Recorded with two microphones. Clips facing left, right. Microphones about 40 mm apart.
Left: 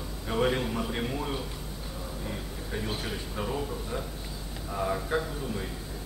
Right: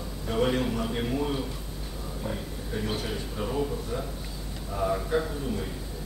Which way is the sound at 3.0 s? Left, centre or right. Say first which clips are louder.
Right 2 dB; centre.